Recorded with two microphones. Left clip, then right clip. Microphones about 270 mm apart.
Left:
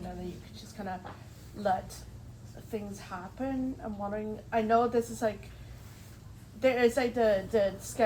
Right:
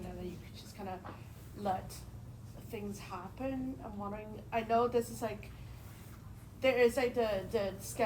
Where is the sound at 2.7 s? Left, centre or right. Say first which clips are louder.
Left 5 dB; left.